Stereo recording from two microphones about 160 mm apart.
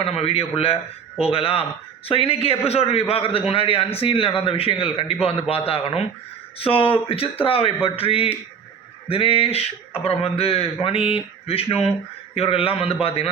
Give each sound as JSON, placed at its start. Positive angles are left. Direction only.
{"t": 0.0, "sound": "a man's voice", "side_deg": 35}